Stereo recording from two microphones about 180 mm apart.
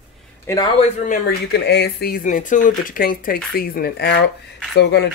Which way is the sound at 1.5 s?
65° left (ahead or behind).